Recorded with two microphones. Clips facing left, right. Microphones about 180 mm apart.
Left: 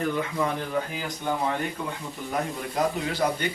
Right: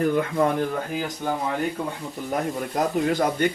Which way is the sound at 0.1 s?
50° right (ahead or behind).